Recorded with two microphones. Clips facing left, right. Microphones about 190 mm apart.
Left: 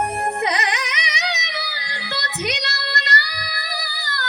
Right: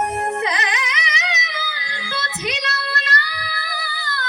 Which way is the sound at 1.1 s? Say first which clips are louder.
Even; 35° left (ahead or behind).